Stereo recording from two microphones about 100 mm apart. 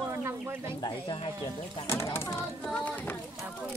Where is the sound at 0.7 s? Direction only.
50° left (ahead or behind).